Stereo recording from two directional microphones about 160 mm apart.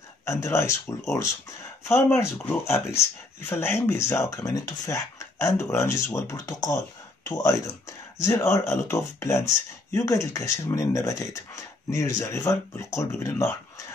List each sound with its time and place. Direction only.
0.2 s speech: 20° left (ahead or behind)